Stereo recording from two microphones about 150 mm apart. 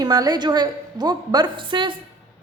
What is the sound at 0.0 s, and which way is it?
A woman's voice, 25° right (ahead or behind).